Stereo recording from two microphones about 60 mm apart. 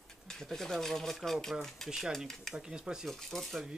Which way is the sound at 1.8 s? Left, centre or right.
Centre.